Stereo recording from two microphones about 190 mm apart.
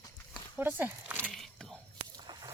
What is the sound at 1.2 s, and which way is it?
Biting, centre (ahead or behind).